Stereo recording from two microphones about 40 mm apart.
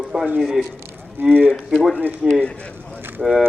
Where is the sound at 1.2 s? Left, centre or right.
Right.